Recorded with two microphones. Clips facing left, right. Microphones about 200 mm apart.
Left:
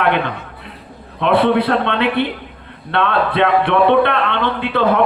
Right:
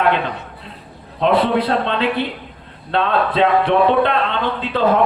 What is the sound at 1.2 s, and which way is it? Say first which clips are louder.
A man's voice: left 2 dB; 60° left (ahead or behind).